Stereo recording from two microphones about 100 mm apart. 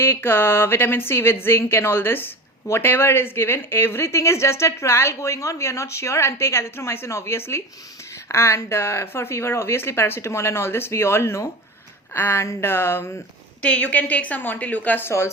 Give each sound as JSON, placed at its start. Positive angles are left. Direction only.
{"t": 0.0, "sound": "a woman's voice", "side_deg": 25}
{"t": 13.6, "sound": "a woman's voice", "side_deg": 10}